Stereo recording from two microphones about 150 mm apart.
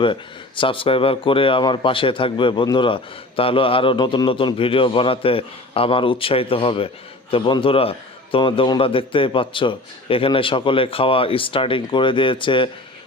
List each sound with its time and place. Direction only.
0.0 s speech: 35° left (ahead or behind)